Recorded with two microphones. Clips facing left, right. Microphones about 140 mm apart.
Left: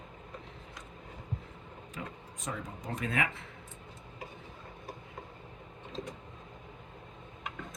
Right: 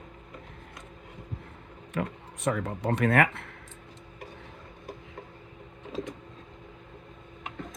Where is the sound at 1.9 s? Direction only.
65° right (ahead or behind).